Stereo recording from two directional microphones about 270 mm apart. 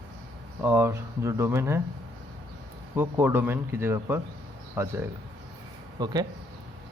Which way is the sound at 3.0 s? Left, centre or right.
Centre.